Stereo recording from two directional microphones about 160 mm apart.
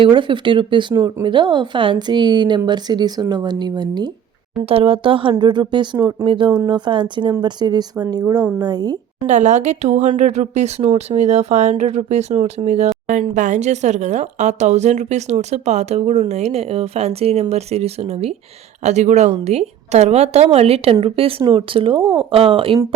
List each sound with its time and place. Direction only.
0.0 s speech: 30° right (ahead or behind)
4.6 s speech: 35° right (ahead or behind)
9.2 s speech: 45° right (ahead or behind)